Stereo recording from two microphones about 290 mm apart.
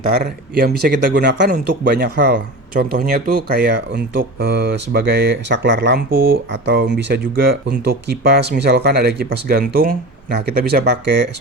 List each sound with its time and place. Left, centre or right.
0.0 s speech: right